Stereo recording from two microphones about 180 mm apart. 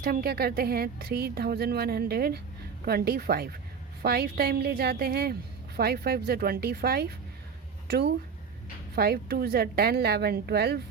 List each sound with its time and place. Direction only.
0.0 s a woman's voice: 55° right (ahead or behind)